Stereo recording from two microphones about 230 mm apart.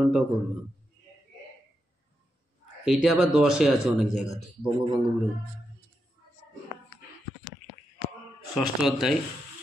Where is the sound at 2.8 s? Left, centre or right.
Centre.